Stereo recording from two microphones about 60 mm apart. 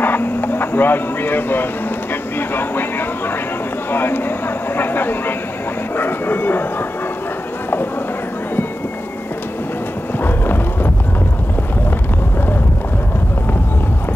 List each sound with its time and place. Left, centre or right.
0.0 s a sound: left
2.3 s speech: left
5.9 s vehicle: left
10.2 s clip-clop: left